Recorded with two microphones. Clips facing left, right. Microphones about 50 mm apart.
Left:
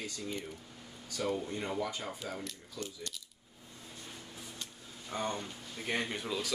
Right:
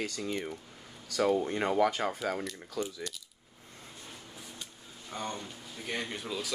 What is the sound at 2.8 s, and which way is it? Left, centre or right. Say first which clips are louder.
Speech: right 8 dB; right.